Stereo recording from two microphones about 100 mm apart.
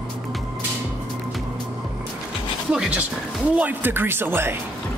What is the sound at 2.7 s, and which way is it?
Speech, 10° right (ahead or behind).